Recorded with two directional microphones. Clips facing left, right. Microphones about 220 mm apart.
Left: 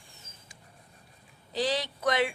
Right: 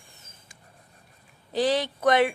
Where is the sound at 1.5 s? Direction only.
50° right (ahead or behind).